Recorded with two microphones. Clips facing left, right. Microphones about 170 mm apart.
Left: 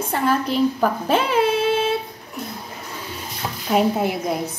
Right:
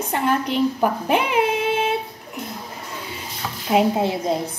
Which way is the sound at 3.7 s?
25° right (ahead or behind).